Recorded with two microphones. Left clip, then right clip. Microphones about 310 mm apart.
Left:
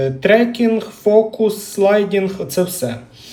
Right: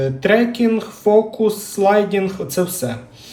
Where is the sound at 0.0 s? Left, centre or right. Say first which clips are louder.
Left 2 dB; centre.